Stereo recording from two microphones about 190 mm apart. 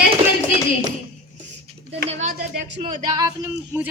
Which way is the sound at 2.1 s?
35° right (ahead or behind).